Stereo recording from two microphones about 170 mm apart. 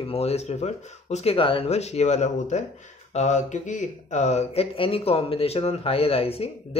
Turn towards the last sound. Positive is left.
turn(degrees=35)  # may be behind; listen again after turning